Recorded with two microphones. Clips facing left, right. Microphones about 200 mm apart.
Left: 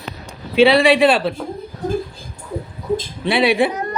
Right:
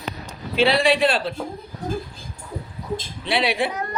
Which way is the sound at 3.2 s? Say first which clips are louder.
Left 6 dB; 55° left (ahead or behind).